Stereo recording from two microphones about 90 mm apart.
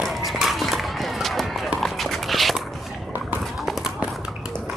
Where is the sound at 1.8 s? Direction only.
Centre (ahead or behind).